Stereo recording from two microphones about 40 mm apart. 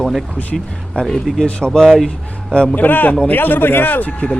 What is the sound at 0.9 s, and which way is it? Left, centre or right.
Speech, left.